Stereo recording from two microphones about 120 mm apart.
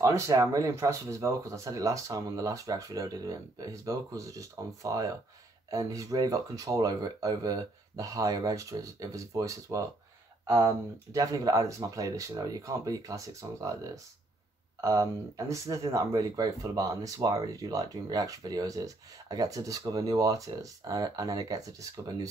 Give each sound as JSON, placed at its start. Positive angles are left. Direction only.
{"t": 0.0, "sound": "speech", "side_deg": -30}
{"t": 14.8, "sound": "speech", "side_deg": -30}